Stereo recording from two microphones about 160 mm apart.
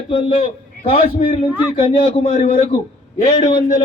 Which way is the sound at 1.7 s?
35° left (ahead or behind).